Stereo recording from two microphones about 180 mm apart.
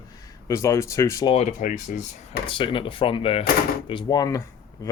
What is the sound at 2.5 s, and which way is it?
Speech, 30° left (ahead or behind).